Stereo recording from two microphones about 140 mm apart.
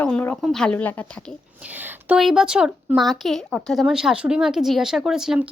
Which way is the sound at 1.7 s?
15° right (ahead or behind).